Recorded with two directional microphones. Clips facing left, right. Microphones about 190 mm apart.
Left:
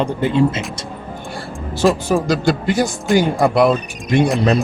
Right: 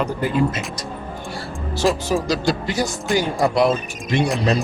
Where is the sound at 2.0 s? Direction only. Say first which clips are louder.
Left 4 dB; 55° left (ahead or behind).